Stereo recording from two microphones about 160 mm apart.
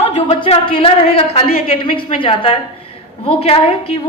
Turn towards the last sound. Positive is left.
turn(degrees=35)  # may be behind; listen again after turning